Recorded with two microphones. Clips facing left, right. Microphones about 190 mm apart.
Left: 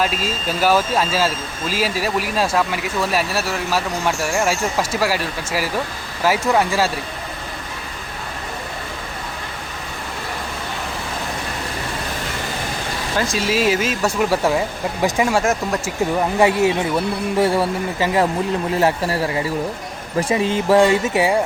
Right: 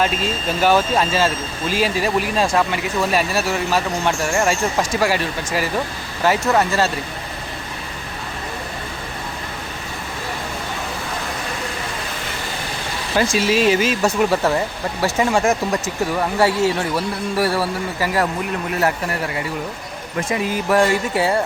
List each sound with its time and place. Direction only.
0.0 s speech: 5° left (ahead or behind)
13.5 s speech: 5° left (ahead or behind)
16.4 s speech: 15° left (ahead or behind)
20.1 s speech: 30° left (ahead or behind); by 21.4 s 15° left (ahead or behind)